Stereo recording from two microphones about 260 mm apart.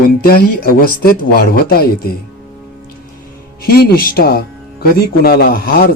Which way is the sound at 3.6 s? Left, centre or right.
Left.